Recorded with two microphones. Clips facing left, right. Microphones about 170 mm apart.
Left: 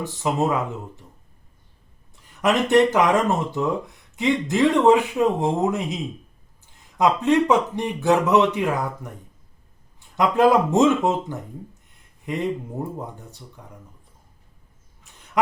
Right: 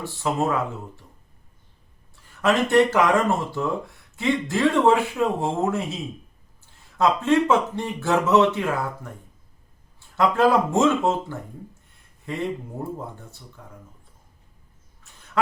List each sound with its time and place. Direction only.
0.0 s speech: 15° left (ahead or behind)
2.2 s speech: 15° left (ahead or behind)
10.2 s speech: 15° left (ahead or behind)
15.1 s duck: 15° left (ahead or behind)